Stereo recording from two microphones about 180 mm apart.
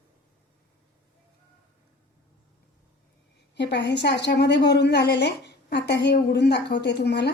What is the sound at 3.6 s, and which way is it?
A woman's voice, 70° left (ahead or behind).